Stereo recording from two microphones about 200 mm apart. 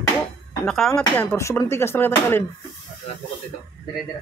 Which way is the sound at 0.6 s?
5° left (ahead or behind).